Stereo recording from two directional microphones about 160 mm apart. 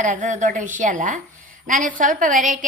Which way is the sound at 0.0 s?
50° right (ahead or behind).